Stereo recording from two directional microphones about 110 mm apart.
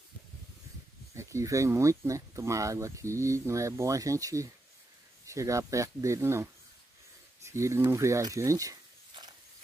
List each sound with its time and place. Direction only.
1.1 s speech: 25° right (ahead or behind)